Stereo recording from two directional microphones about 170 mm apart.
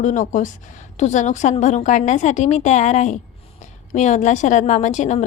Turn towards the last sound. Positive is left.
turn(degrees=45)  # may be behind; listen again after turning